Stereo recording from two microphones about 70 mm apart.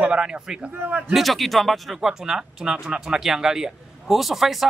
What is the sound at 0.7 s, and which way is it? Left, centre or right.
Speech, right.